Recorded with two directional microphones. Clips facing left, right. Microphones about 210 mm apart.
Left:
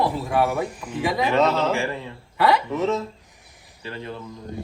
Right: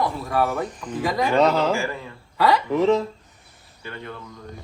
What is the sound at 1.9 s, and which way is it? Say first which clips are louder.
Speech: left 2 dB; 30° left (ahead or behind).